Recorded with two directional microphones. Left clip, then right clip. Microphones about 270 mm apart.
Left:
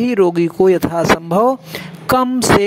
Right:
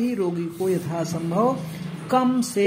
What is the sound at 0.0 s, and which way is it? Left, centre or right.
Speech, left.